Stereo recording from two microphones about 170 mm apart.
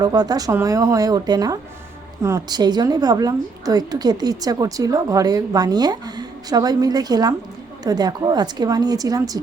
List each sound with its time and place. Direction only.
0.0 s a woman's voice: 25° right (ahead or behind)